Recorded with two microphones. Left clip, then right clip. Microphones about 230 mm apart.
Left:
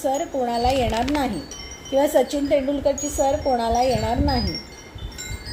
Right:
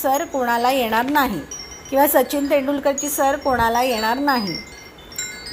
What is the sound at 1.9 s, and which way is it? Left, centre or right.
Speech, right.